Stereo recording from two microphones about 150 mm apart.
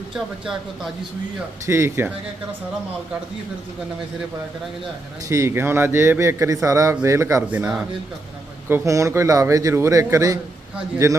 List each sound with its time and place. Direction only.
1.6 s speech: 20° right (ahead or behind)
5.3 s a man's voice: 20° right (ahead or behind)
8.7 s a man's voice: 20° right (ahead or behind)